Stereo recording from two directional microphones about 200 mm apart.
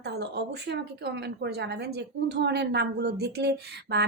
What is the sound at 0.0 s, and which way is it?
A woman's voice, 55° right (ahead or behind).